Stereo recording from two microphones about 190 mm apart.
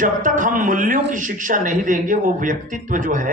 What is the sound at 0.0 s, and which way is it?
A man's voice, 45° right (ahead or behind).